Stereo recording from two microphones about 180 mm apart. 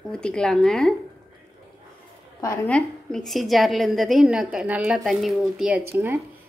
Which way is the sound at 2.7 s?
5° left (ahead or behind).